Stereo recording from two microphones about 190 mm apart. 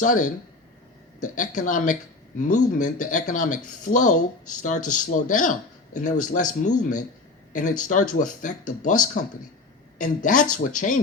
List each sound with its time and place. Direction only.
0.0 s speech: 40° left (ahead or behind)